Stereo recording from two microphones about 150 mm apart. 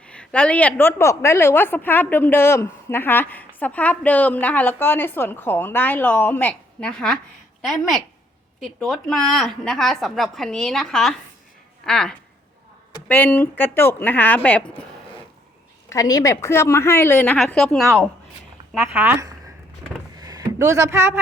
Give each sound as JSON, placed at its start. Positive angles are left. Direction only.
{"t": 0.1, "sound": "a woman's voice", "side_deg": 10}
{"t": 15.9, "sound": "a woman's voice", "side_deg": 25}
{"t": 18.9, "sound": "speech", "side_deg": -15}
{"t": 20.1, "sound": "a sound", "side_deg": -25}